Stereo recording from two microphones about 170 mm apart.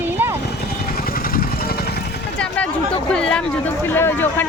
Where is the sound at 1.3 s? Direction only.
60° left (ahead or behind).